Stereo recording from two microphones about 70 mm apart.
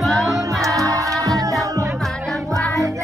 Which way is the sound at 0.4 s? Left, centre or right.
Right.